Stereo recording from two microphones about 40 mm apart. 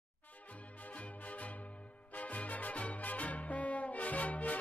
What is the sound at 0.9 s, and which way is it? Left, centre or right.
Music, left.